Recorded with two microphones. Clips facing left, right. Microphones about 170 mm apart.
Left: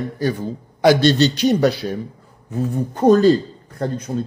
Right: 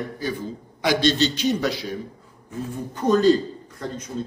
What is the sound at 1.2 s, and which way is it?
Speech, 65° left (ahead or behind).